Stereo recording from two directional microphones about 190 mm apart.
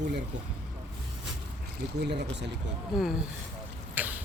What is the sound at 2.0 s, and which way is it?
Speech, 60° right (ahead or behind).